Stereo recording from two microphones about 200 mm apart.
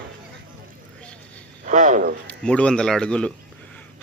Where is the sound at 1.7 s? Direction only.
40° right (ahead or behind).